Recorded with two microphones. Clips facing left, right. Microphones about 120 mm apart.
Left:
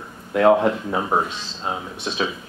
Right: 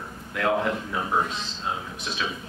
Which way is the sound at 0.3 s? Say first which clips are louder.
Left 9 dB; 35° left (ahead or behind).